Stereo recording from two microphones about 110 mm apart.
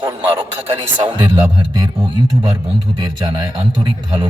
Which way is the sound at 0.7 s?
50° right (ahead or behind).